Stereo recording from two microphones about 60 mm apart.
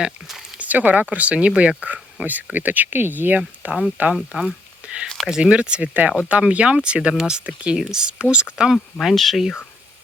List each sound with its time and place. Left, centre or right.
0.6 s speech: right
4.1 s speech: centre
7.1 s speech: centre
8.7 s speech: centre